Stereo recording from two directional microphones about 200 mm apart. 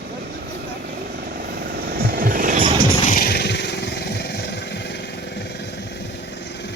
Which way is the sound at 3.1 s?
50° left (ahead or behind).